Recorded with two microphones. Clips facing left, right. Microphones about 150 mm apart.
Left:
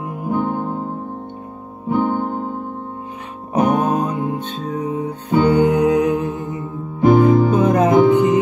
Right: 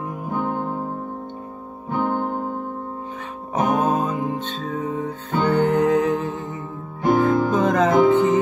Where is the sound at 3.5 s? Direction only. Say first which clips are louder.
Left 3 dB; 15° left (ahead or behind).